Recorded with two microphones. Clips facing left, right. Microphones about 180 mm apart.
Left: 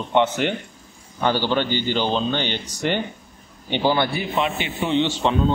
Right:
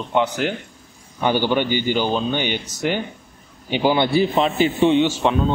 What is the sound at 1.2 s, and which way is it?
Speech, 15° right (ahead or behind).